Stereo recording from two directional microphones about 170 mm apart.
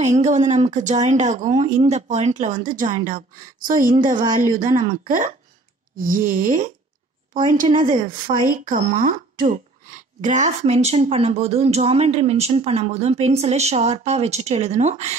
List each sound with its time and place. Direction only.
0.0 s speech: 40° right (ahead or behind)
8.1 s speech: 55° right (ahead or behind)